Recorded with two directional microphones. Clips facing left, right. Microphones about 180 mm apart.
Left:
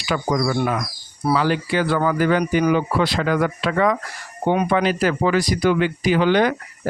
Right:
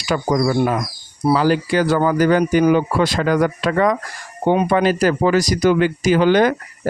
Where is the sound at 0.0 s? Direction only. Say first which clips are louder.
Right 3 dB; 40° right (ahead or behind).